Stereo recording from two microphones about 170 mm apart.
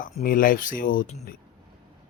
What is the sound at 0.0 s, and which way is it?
Speech, 55° left (ahead or behind).